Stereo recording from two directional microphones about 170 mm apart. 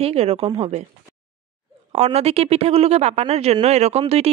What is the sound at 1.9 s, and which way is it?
A man's voice, 40° right (ahead or behind).